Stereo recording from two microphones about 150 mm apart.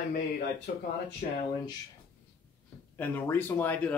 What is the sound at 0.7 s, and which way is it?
Speech, 70° left (ahead or behind).